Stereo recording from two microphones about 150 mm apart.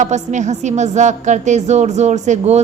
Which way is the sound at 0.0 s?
50° right (ahead or behind).